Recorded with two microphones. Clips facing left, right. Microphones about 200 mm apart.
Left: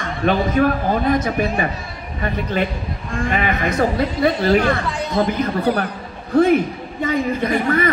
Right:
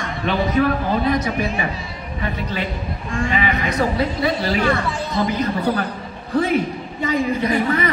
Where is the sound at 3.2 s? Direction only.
50° left (ahead or behind).